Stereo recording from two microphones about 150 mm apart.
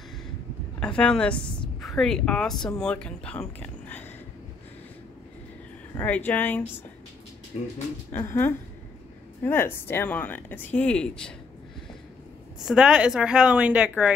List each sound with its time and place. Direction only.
0.7 s a woman's voice: 5° left (ahead or behind)
5.9 s speech: 10° left (ahead or behind)
8.1 s speech: 15° left (ahead or behind)
12.5 s speech: 5° right (ahead or behind)